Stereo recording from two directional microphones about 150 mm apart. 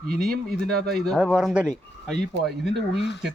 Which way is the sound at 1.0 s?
Centre (ahead or behind).